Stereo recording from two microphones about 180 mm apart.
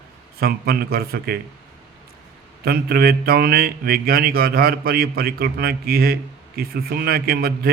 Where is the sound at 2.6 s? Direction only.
60° right (ahead or behind).